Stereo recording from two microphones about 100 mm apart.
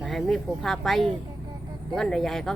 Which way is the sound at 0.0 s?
Centre (ahead or behind).